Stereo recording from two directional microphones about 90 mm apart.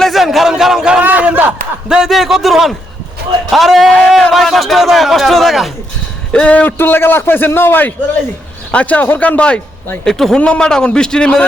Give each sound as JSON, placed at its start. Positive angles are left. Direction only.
{"t": 0.0, "sound": "a sound", "side_deg": 0}
{"t": 1.9, "sound": "a man's voice", "side_deg": -5}
{"t": 6.3, "sound": "a man's voice", "side_deg": 15}
{"t": 10.0, "sound": "a man's voice", "side_deg": 5}